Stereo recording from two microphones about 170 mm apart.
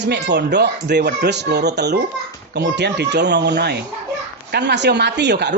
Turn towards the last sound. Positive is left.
turn(degrees=-90)